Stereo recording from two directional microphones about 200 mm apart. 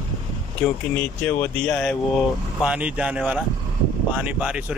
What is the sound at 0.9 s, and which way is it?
Speech, 5° left (ahead or behind).